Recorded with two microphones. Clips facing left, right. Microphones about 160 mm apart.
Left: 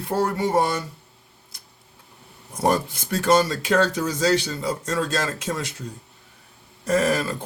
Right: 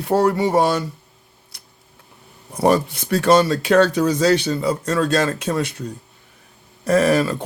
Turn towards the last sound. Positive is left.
turn(degrees=-70)  # may be behind; listen again after turning